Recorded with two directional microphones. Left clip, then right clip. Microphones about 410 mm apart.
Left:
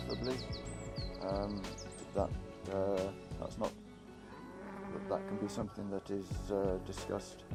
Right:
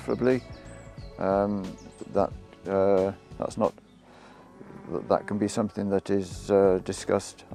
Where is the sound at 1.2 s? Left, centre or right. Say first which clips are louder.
Right 14 dB; right.